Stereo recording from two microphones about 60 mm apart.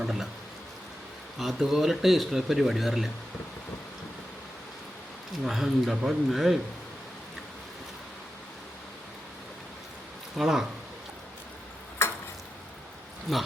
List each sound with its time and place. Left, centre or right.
0.0 s speech: centre
1.4 s speech: centre
5.4 s speech: centre
10.3 s speech: centre
12.0 s a sound: left
13.3 s speech: centre